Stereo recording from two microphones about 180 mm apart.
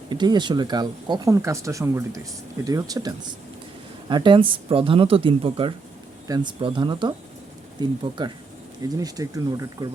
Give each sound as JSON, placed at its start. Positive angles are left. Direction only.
{"t": 0.1, "sound": "speech", "side_deg": -25}